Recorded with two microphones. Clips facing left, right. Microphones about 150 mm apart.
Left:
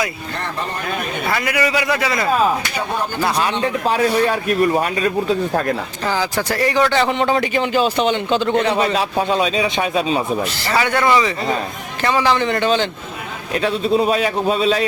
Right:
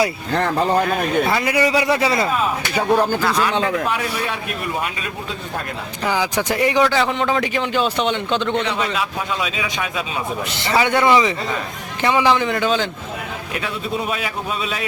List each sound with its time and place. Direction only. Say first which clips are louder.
1.3 s a man's voice: right 1 dB; 30° right (ahead or behind)
3.2 s speech: left 1 dB; 20° left (ahead or behind)
3.6 s a man's voice: left 3 dB; 35° left (ahead or behind)
6.1 s speech: even; 15° right (ahead or behind)
6.8 s a man's voice: left 2 dB; centre (ahead or behind)
8.5 s a man's voice: left 5 dB; 40° left (ahead or behind)
10.5 s a man's voice: right 1 dB; 20° right (ahead or behind)
12.5 s a man's voice: left 2 dB; centre (ahead or behind)
13.6 s a man's voice: left 9 dB; 30° left (ahead or behind)